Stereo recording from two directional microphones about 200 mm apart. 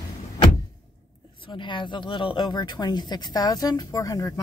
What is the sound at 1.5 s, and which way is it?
Speech, 25° left (ahead or behind).